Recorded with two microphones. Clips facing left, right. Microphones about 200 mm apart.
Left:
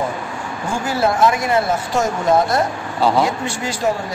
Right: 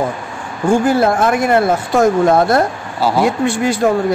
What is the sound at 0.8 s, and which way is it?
Speech, 55° right (ahead or behind).